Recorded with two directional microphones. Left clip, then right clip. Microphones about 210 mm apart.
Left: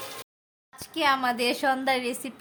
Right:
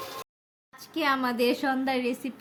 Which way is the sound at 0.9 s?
20° left (ahead or behind).